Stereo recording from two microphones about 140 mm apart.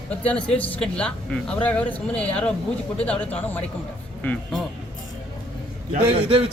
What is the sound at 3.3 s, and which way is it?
A man's voice, 10° left (ahead or behind).